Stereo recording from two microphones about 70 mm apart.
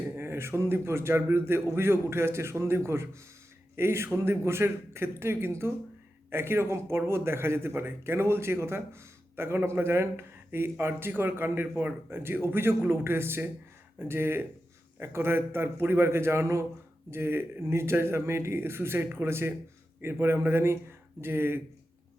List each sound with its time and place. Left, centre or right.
0.2 s a man's voice: right